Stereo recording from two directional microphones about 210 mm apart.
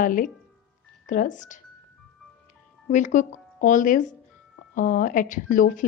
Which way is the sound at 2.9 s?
35° left (ahead or behind).